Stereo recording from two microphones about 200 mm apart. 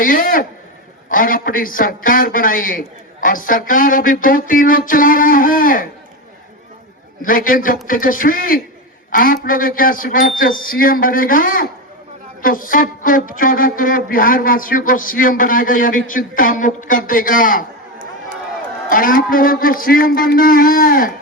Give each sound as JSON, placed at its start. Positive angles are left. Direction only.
{"t": 0.0, "sound": "speech", "side_deg": 45}
{"t": 7.2, "sound": "speech", "side_deg": 45}
{"t": 18.9, "sound": "speech", "side_deg": 45}